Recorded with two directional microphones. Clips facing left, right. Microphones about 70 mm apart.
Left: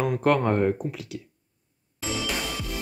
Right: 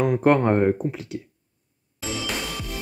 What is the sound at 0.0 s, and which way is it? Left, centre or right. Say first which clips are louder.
Speech: right 4 dB; right.